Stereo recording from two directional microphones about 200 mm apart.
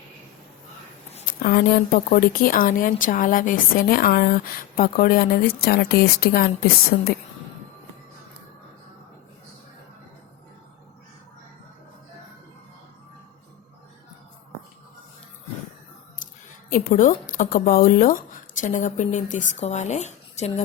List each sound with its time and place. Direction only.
1.1 s speech: 45° left (ahead or behind)
16.6 s speech: 45° left (ahead or behind)